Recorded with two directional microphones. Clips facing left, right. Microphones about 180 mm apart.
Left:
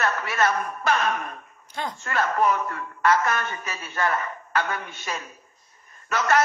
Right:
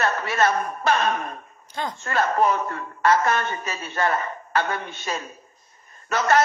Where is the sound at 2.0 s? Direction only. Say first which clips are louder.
Right 2 dB; 30° right (ahead or behind).